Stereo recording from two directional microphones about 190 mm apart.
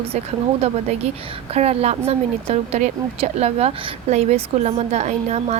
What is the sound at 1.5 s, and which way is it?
A woman's voice, 30° right (ahead or behind).